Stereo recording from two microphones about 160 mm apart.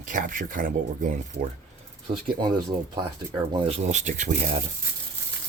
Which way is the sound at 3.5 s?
35° right (ahead or behind).